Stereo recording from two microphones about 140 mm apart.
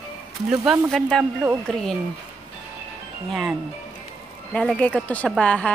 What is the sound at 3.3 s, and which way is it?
Speech, centre (ahead or behind).